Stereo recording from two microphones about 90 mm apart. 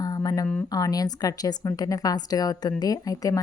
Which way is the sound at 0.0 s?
40° left (ahead or behind).